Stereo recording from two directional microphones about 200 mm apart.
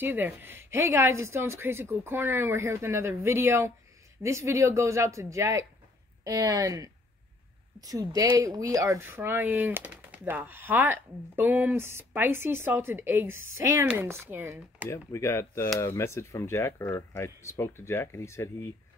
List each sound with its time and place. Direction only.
0.0 s speech: 10° right (ahead or behind)
14.9 s speech: 15° left (ahead or behind)